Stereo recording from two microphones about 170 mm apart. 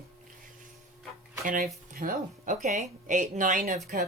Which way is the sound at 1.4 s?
55° right (ahead or behind).